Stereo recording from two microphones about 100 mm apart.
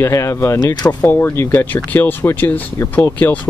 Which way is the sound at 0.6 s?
40° left (ahead or behind).